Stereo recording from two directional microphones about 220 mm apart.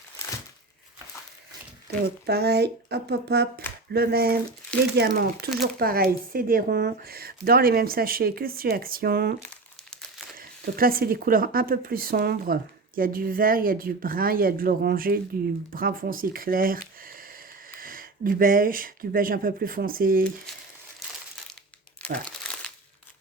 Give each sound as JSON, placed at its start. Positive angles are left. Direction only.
{"t": 1.9, "sound": "a child's voice", "side_deg": -45}
{"t": 17.0, "sound": "a sound", "side_deg": -40}
{"t": 17.7, "sound": "speech", "side_deg": -40}
{"t": 22.0, "sound": "crumpling", "side_deg": 5}